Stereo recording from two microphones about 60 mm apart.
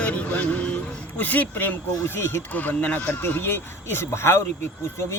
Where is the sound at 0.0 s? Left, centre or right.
Left.